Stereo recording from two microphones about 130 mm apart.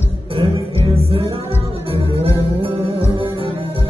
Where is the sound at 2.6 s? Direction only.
50° right (ahead or behind).